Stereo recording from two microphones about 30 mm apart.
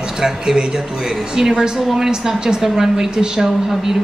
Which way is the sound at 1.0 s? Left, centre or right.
Centre.